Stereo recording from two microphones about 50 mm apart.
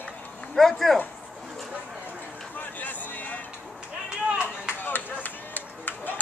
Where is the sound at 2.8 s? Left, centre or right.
Left.